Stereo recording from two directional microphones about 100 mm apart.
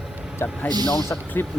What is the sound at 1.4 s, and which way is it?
Speech, 20° left (ahead or behind).